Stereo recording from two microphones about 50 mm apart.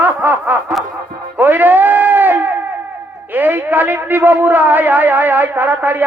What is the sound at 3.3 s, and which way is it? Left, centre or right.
A man's voice, right.